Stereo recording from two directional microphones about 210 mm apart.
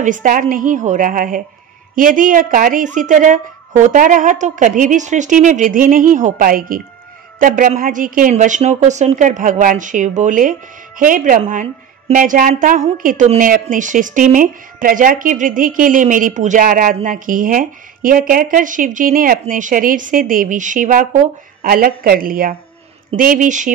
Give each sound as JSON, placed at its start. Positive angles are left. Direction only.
{"t": 0.0, "sound": "a woman's voice", "side_deg": -40}